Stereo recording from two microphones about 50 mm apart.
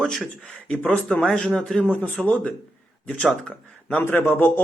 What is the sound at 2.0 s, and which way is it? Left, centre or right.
Speech, left.